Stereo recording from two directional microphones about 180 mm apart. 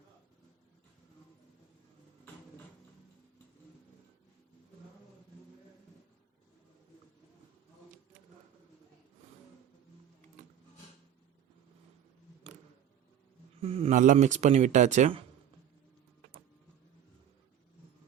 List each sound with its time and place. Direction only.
13.6 s speech: 35° right (ahead or behind)